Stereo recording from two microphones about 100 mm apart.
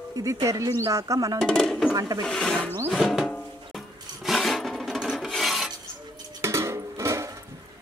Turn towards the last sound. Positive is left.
turn(degrees=-30)  # may be behind; listen again after turning